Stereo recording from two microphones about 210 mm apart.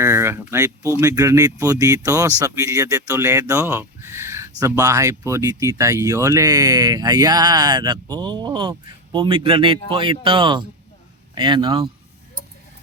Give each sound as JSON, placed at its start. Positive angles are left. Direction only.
{"t": 0.0, "sound": "speech", "side_deg": -10}